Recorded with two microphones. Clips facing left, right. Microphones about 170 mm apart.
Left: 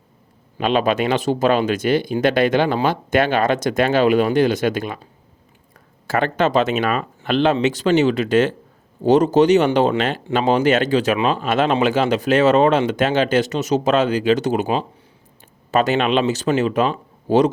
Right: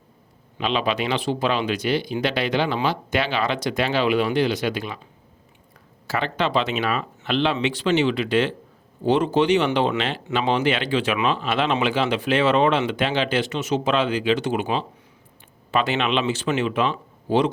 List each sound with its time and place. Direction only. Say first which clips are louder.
0.6 s speech: left 5 dB; 50° left (ahead or behind)
6.1 s speech: left 6 dB; 50° left (ahead or behind)